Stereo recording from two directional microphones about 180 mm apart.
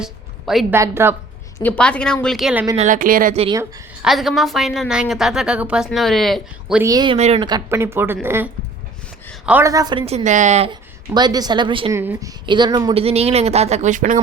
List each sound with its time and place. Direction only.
0.0 s a sound: centre (ahead or behind)
0.7 s speech: 15° right (ahead or behind)
1.5 s a woman's voice: 10° left (ahead or behind)
2.7 s speech: 45° right (ahead or behind)
4.0 s a woman's voice: centre (ahead or behind)
6.8 s speech: 20° right (ahead or behind)
7.2 s speech: 35° right (ahead or behind)
7.4 s speech: 20° right (ahead or behind)
9.5 s speech: 15° right (ahead or behind)
10.1 s speech: 40° right (ahead or behind)
10.7 s a woman's voice: 25° right (ahead or behind)
11.9 s speech: 15° right (ahead or behind); by 14.2 s 45° right (ahead or behind)